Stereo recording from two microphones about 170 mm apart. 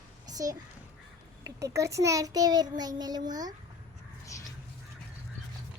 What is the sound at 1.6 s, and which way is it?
A child's voice, 20° right (ahead or behind).